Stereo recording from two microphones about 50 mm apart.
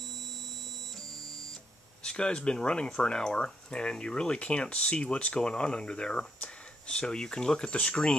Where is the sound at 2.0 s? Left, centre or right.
Centre.